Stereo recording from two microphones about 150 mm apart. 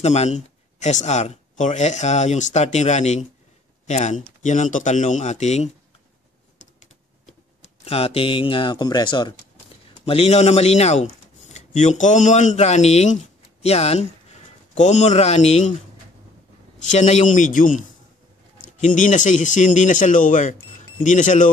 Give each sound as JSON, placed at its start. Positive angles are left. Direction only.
{"t": 0.0, "sound": "speech", "side_deg": 50}
{"t": 7.8, "sound": "speech", "side_deg": 40}
{"t": 10.0, "sound": "speech", "side_deg": 45}
{"t": 16.9, "sound": "speech", "side_deg": 50}